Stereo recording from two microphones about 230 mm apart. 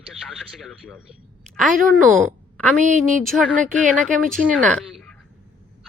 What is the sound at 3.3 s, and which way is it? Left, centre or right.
A man's voice, centre.